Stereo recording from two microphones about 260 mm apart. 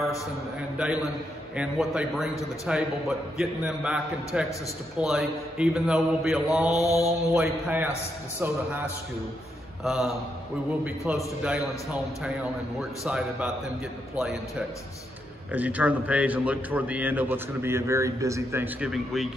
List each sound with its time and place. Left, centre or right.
0.6 s a man's voice: centre
6.8 s mantra: right
7.3 s a man's voice: centre
15.5 s a man's voice: centre